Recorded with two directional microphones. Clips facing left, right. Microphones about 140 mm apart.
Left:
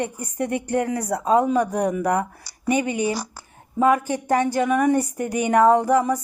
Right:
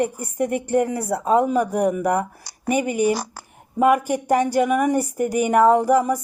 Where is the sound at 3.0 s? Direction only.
50° right (ahead or behind).